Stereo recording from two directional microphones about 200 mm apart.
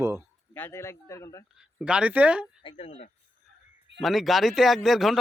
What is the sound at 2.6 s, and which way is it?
Speech, 25° left (ahead or behind).